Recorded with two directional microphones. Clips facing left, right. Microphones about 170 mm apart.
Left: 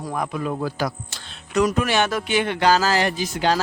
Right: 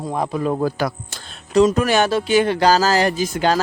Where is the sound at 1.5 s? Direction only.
25° right (ahead or behind).